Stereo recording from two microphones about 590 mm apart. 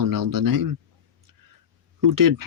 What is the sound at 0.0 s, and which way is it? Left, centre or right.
Speech, right.